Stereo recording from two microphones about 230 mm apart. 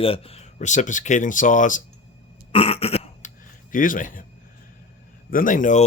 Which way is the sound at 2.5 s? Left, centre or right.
Left.